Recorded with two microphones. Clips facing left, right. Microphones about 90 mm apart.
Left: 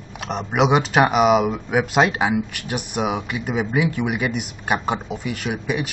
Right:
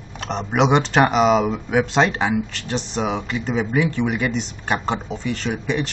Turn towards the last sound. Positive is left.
turn(degrees=10)  # may be behind; listen again after turning